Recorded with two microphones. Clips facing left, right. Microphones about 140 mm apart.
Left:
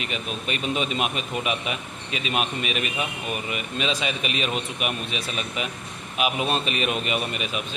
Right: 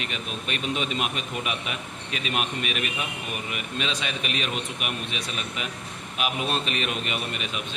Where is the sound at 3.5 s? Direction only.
5° left (ahead or behind).